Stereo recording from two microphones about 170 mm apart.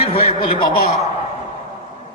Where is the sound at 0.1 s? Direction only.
35° left (ahead or behind).